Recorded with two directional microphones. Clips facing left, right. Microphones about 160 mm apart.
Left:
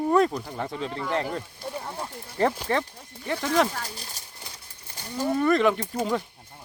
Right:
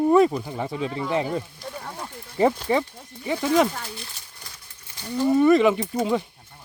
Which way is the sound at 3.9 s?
40° left (ahead or behind).